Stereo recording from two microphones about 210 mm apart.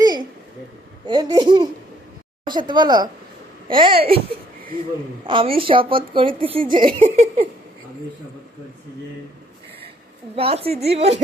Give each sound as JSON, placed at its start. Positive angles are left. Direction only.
{"t": 0.0, "sound": "a sound", "side_deg": -20}
{"t": 1.0, "sound": "a woman's voice", "side_deg": -20}
{"t": 5.2, "sound": "a woman's voice", "side_deg": -25}
{"t": 7.0, "sound": "giggle", "side_deg": -30}
{"t": 10.3, "sound": "a woman's voice", "side_deg": -25}